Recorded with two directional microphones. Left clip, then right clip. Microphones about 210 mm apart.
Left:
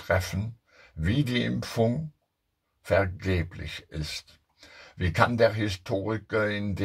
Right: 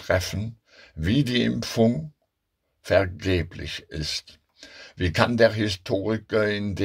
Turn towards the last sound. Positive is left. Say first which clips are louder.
# right 4 dB
turn(degrees=-35)  # may be behind; listen again after turning